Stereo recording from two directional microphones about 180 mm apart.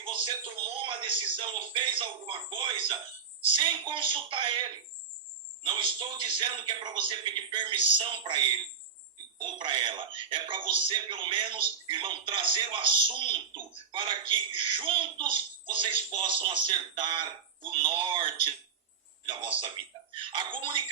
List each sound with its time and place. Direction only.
0.0 s speech: 30° right (ahead or behind)
9.4 s speech: 25° right (ahead or behind)